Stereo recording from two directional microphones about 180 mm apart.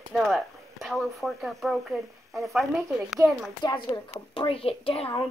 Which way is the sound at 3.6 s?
25° left (ahead or behind).